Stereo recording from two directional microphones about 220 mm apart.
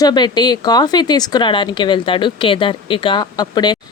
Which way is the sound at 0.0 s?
20° left (ahead or behind).